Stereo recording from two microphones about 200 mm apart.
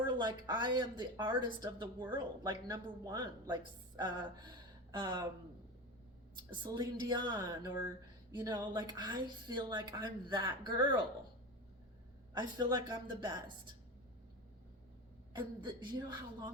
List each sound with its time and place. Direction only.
0.0 s speech: 20° right (ahead or behind)
6.5 s speech: 20° right (ahead or behind)
12.3 s speech: 20° right (ahead or behind)
15.3 s speech: 20° right (ahead or behind)